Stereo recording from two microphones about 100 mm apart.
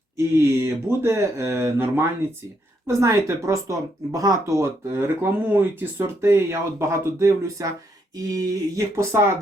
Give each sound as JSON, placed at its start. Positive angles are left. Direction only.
{"t": 0.3, "sound": "speech", "side_deg": -20}